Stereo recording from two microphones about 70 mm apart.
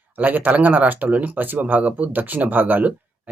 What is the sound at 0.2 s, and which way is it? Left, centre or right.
Speech, right.